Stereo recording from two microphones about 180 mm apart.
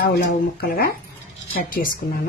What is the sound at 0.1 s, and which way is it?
A woman's voice, 60° left (ahead or behind).